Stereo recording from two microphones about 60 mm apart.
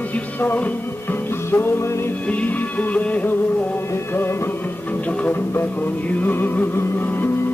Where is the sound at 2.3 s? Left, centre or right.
Left.